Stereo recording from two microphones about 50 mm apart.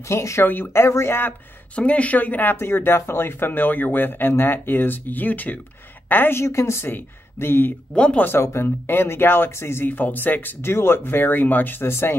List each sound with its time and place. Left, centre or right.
0.1 s speech: left
0.7 s speech: left
1.8 s speech: left
2.5 s a woman's voice: left
6.3 s speech: left
7.3 s speech: left
7.9 s speech: centre
8.4 s speech: left
9.8 s speech: left
10.6 s speech: left
11.8 s speech: left